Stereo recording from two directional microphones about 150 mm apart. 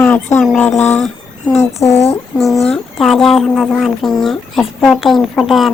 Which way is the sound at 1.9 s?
45° left (ahead or behind).